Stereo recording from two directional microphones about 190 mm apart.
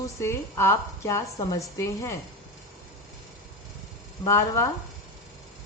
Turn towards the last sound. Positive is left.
turn(degrees=15)  # may be behind; listen again after turning